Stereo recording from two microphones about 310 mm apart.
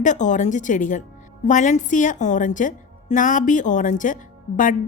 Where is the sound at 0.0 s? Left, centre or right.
Left.